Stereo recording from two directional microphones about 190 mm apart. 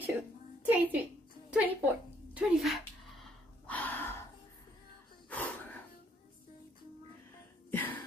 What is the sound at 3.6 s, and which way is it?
Gasp, 10° left (ahead or behind).